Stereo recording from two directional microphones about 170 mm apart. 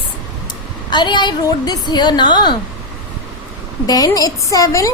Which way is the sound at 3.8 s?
20° left (ahead or behind).